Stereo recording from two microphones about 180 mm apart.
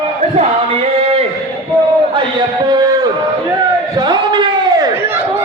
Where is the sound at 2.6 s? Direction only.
25° right (ahead or behind).